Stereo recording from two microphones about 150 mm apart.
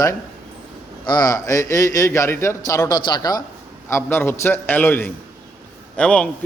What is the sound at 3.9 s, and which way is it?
A man's voice, 15° left (ahead or behind).